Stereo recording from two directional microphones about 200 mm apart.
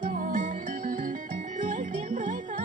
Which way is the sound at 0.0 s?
40° right (ahead or behind).